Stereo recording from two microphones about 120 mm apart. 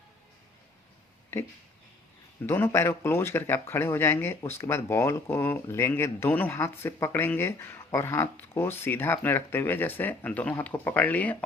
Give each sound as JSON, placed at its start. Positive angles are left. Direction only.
{"t": 1.3, "sound": "speech", "side_deg": 20}
{"t": 2.5, "sound": "speech", "side_deg": 20}